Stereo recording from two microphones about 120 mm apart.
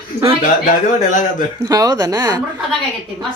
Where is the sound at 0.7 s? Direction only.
90° left.